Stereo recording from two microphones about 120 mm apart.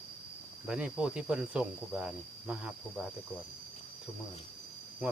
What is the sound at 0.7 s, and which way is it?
Speech, 10° right (ahead or behind).